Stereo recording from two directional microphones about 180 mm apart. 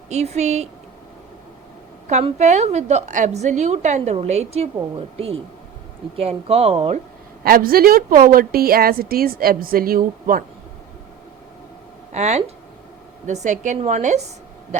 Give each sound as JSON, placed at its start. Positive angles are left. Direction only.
{"t": 0.1, "sound": "a woman's voice", "side_deg": -40}
{"t": 2.0, "sound": "a woman's voice", "side_deg": -40}
{"t": 7.4, "sound": "a woman's voice", "side_deg": -55}
{"t": 12.1, "sound": "a woman's voice", "side_deg": -40}